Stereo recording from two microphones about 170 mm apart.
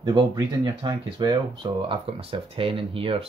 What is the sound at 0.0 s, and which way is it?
Speech, 25° right (ahead or behind).